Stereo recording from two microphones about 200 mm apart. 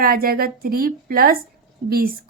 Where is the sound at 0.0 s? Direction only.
45° right (ahead or behind).